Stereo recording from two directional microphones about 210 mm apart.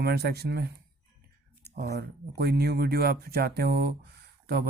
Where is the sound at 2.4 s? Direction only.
50° right (ahead or behind).